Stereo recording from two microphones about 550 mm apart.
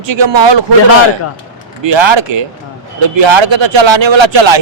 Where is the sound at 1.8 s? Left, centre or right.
Right.